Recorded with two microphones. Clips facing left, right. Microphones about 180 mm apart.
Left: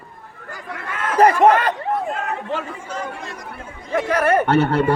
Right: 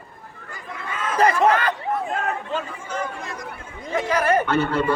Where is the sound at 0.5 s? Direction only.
70° left (ahead or behind).